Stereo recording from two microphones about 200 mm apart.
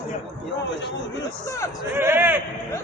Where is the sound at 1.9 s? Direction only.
10° right (ahead or behind).